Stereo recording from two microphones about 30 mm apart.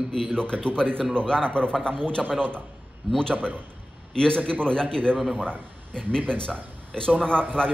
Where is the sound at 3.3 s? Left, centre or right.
Right.